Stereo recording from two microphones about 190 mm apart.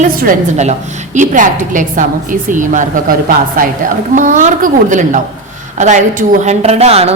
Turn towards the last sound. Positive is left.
turn(degrees=-35)  # may be behind; listen again after turning